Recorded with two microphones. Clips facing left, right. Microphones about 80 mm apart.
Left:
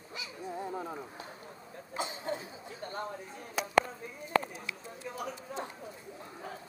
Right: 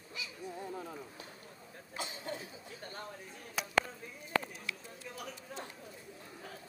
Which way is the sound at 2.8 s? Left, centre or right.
Left.